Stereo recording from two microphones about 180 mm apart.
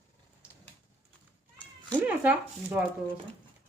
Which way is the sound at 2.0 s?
10° right (ahead or behind).